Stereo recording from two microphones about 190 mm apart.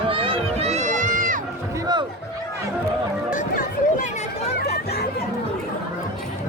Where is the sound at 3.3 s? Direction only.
45° left (ahead or behind).